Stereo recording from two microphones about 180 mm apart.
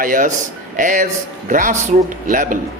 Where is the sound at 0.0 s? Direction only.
45° right (ahead or behind).